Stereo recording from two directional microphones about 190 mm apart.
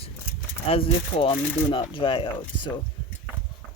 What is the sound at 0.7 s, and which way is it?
Speech, 30° left (ahead or behind).